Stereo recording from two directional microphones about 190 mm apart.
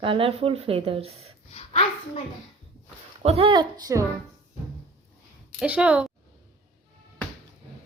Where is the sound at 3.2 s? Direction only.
30° right (ahead or behind).